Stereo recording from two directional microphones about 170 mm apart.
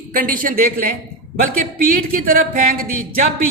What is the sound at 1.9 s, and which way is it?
Speech, 55° right (ahead or behind).